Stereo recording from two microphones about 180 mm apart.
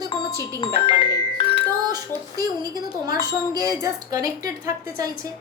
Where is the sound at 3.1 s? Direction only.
20° right (ahead or behind).